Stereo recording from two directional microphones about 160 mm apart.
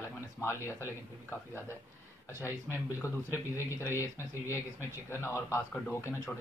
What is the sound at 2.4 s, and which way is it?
Speech, 15° left (ahead or behind).